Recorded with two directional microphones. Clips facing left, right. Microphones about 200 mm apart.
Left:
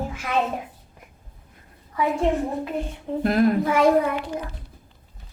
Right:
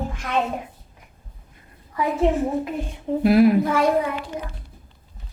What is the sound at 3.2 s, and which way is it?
Speech, 5° right (ahead or behind).